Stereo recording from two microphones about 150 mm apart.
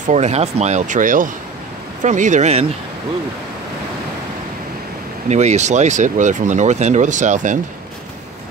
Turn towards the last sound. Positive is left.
turn(degrees=-55)  # may be behind; listen again after turning